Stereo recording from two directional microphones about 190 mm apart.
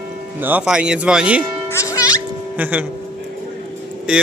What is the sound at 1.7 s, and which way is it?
Music, 15° left (ahead or behind).